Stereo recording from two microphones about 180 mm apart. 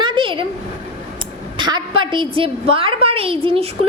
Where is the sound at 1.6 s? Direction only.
25° right (ahead or behind).